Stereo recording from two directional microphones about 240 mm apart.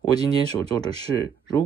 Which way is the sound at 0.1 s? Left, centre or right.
Centre.